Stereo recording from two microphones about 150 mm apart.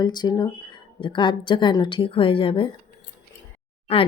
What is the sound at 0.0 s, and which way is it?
A woman's voice, 30° left (ahead or behind).